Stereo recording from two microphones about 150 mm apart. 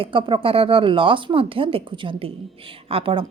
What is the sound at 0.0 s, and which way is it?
A woman's voice, 35° right (ahead or behind).